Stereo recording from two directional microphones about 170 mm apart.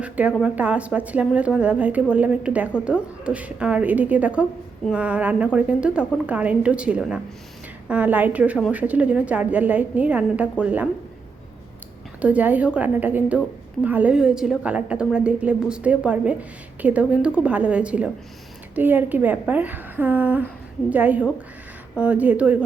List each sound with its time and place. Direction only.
0.0 s a woman's voice: 10° right (ahead or behind)
12.2 s a woman's voice: 10° right (ahead or behind)